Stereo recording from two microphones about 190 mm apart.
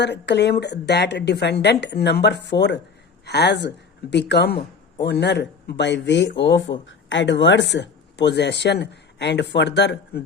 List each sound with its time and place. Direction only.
0.0 s speech: 65° left (ahead or behind)